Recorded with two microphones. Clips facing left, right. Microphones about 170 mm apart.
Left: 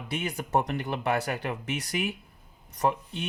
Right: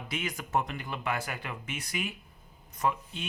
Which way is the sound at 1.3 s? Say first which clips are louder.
Left 7 dB; 40° left (ahead or behind).